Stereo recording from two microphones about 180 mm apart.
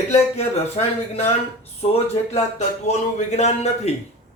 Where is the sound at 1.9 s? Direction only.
35° left (ahead or behind).